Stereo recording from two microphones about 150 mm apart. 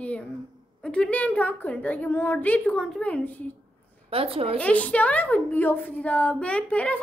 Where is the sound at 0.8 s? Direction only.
5° left (ahead or behind).